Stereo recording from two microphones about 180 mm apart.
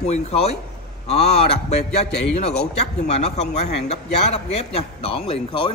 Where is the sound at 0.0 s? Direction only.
35° left (ahead or behind).